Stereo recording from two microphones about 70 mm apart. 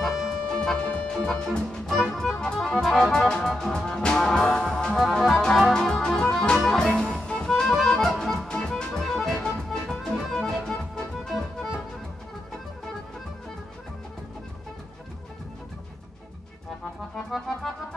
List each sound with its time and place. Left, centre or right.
0.0 s music: centre
0.7 s music: centre
17.3 s music: centre